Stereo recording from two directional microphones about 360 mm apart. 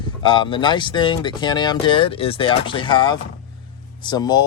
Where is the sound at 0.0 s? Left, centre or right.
Centre.